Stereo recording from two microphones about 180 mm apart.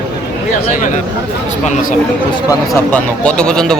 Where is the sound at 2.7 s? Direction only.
5° left (ahead or behind).